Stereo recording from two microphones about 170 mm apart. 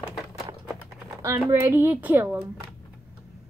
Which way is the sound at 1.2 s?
15° right (ahead or behind).